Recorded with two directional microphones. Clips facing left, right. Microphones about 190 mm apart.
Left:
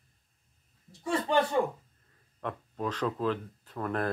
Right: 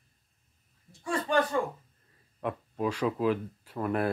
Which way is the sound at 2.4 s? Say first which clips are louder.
Right 3 dB; 10° right (ahead or behind).